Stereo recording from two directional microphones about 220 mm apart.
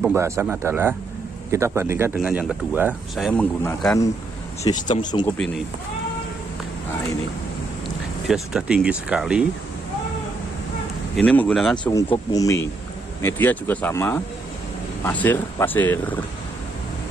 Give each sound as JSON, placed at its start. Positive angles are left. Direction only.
{"t": 0.1, "sound": "speech", "side_deg": -10}
{"t": 3.6, "sound": "speech", "side_deg": 10}
{"t": 8.3, "sound": "speech", "side_deg": -5}
{"t": 11.1, "sound": "speech", "side_deg": 5}
{"t": 11.8, "sound": "speech", "side_deg": 15}